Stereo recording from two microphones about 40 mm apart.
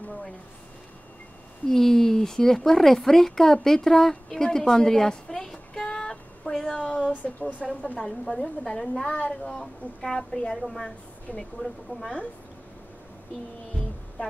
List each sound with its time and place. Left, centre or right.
1.7 s a woman's voice: centre
4.1 s a sound: centre
5.9 s child singing: left
6.5 s a sound: centre
7.2 s speech: left
8.0 s a woman's voice: centre
9.0 s speech: left
9.5 s a woman's voice: centre
11.3 s speech: left
12.0 s a woman's voice: left